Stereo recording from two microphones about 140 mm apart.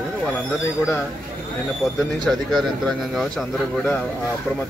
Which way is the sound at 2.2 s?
Centre (ahead or behind).